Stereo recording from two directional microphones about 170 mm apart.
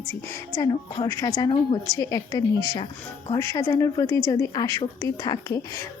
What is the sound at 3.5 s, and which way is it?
A woman's voice, 20° left (ahead or behind).